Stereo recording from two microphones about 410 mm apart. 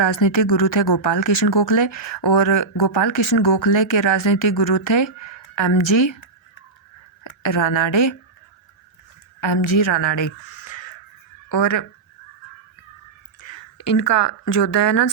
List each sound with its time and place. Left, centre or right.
0.0 s speech: left
7.3 s a woman's voice: left
9.7 s speech: left
13.4 s a sound: left
14.5 s speech: left